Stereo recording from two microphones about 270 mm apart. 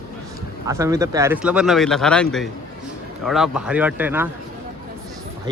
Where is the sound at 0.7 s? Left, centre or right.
Centre.